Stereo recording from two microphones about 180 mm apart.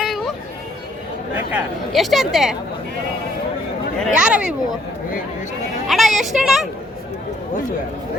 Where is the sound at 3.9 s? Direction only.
Centre (ahead or behind).